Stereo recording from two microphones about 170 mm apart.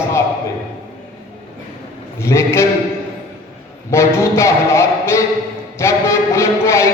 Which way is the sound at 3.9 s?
15° left (ahead or behind).